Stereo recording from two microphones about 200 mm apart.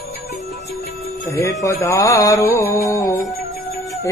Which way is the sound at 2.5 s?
15° left (ahead or behind).